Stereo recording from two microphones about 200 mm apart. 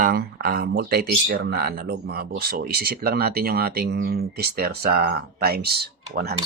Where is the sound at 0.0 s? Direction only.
50° right (ahead or behind).